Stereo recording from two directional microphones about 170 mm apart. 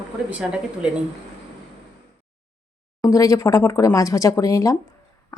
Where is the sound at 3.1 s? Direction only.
20° left (ahead or behind).